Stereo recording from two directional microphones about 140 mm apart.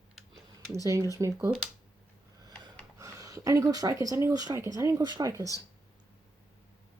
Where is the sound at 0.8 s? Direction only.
25° right (ahead or behind).